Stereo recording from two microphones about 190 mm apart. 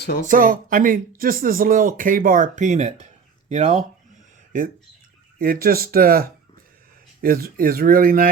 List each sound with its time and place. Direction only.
0.3 s speech: 45° right (ahead or behind)